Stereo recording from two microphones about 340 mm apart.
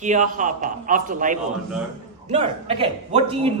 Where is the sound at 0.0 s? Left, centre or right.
Right.